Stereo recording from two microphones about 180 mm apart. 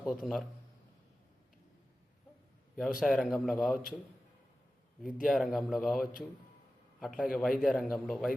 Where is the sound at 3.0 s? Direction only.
Centre (ahead or behind).